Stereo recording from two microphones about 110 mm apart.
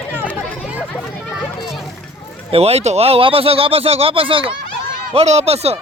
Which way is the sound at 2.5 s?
70° right (ahead or behind).